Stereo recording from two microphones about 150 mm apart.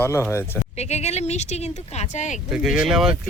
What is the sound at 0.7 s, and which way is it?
Speech, 45° left (ahead or behind).